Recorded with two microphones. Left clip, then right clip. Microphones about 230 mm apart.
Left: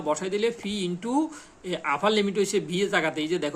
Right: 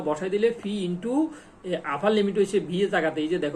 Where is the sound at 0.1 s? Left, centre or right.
Left.